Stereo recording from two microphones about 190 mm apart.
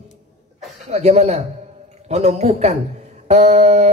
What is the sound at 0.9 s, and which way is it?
A man's voice, 35° right (ahead or behind).